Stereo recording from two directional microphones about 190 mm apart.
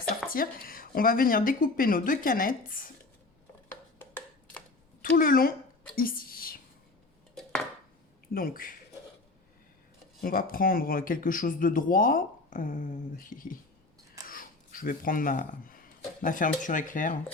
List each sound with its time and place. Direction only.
0.3 s speech: 50° left (ahead or behind)
5.0 s speech: 50° left (ahead or behind)
6.0 s a sound: 50° left (ahead or behind)
8.3 s speech: 50° left (ahead or behind)
10.2 s speech: 50° left (ahead or behind)